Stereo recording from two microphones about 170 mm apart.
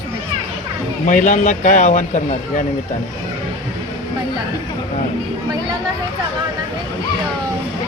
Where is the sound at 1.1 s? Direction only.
45° left (ahead or behind).